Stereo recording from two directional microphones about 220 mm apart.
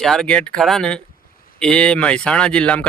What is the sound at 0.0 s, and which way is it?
Speech, centre (ahead or behind).